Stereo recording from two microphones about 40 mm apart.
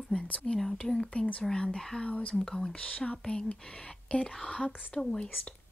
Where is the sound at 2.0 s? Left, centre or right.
Left.